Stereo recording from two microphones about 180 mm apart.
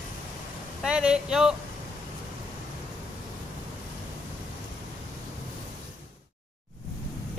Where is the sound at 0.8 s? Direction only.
5° right (ahead or behind).